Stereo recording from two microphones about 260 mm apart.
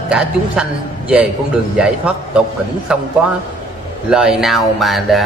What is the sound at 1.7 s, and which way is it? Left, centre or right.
Speech, centre.